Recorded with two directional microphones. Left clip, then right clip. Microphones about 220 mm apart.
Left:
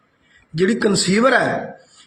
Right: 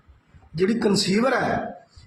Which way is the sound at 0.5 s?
10° left (ahead or behind).